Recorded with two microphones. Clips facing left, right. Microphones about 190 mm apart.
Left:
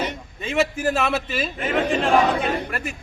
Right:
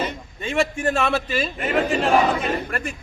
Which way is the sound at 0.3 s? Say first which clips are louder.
Even; centre (ahead or behind).